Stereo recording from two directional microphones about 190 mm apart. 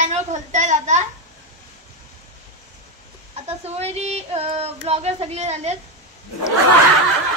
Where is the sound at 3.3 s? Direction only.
35° right (ahead or behind).